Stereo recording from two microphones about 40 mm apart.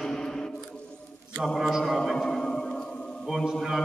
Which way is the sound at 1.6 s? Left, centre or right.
Centre.